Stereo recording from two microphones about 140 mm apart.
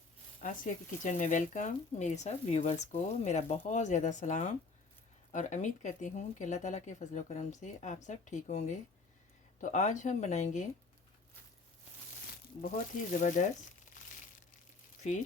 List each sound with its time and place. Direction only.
0.4 s speech: 65° left (ahead or behind)
12.6 s speech: 70° left (ahead or behind)